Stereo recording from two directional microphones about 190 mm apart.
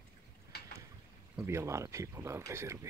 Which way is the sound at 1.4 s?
15° right (ahead or behind).